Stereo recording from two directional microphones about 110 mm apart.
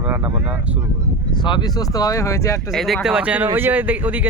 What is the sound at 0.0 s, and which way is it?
Speech, 20° right (ahead or behind).